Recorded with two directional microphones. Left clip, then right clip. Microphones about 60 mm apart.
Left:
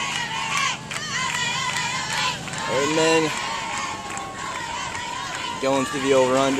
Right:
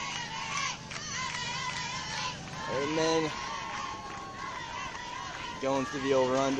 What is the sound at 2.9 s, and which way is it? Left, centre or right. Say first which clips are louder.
Speech: left 9 dB; right.